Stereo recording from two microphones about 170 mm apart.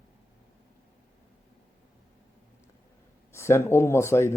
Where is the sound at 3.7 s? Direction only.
15° left (ahead or behind).